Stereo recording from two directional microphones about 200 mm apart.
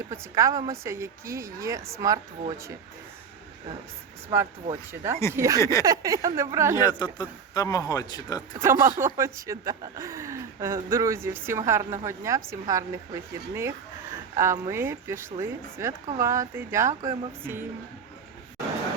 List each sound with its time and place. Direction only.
0.1 s a woman's voice: 15° right (ahead or behind)
4.3 s a woman's voice: 15° right (ahead or behind)
5.5 s a sound: 15° left (ahead or behind)
5.8 s a woman's voice: 15° right (ahead or behind)
6.8 s a man's voice: 20° left (ahead or behind)
8.5 s a woman's voice: 10° right (ahead or behind)